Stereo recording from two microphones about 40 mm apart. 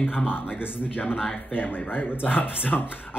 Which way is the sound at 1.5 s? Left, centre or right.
Left.